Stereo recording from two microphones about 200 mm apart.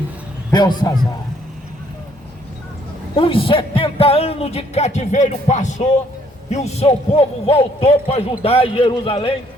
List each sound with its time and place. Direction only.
0.5 s a man's voice: 20° left (ahead or behind)
3.2 s a man's voice: 25° left (ahead or behind)